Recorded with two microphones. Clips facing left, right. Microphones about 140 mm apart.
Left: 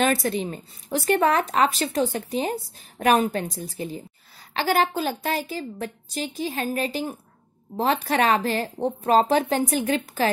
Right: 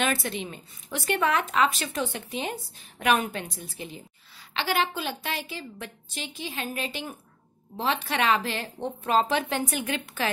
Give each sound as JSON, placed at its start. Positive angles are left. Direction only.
{"t": 0.0, "sound": "a woman's voice", "side_deg": 40}